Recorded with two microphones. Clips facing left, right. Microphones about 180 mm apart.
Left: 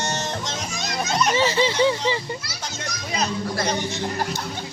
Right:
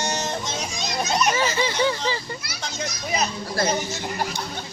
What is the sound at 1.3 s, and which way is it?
Speech, 25° left (ahead or behind).